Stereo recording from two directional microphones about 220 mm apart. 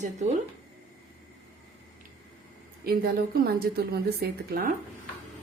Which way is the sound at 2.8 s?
40° right (ahead or behind).